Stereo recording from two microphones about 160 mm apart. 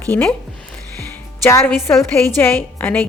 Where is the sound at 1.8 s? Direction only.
15° left (ahead or behind).